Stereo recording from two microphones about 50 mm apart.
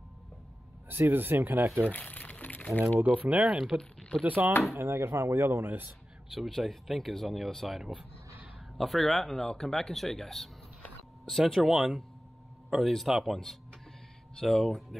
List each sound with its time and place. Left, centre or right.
0.8 s speech: right
1.9 s crumpling: left
3.1 s speech: right
4.7 s speech: right
6.3 s speech: centre
14.3 s speech: centre